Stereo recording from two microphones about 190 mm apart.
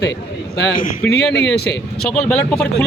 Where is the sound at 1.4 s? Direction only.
60° left (ahead or behind).